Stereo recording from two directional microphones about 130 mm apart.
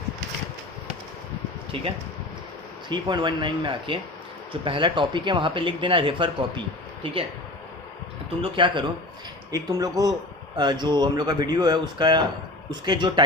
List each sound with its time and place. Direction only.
1.7 s speech: 45° right (ahead or behind)
2.9 s speech: 35° right (ahead or behind)
8.4 s speech: 40° right (ahead or behind)
9.5 s speech: 25° right (ahead or behind)